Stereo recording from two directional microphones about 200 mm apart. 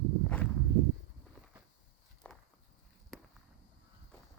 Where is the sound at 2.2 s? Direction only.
5° left (ahead or behind).